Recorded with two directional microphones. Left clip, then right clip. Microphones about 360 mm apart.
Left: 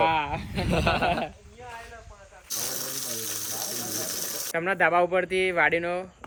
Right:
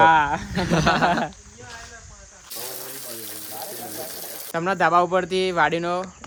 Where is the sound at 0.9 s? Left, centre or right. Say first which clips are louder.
Right 5 dB; right.